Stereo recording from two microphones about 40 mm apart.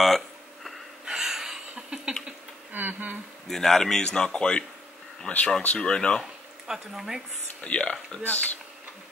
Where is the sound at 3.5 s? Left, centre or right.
Centre.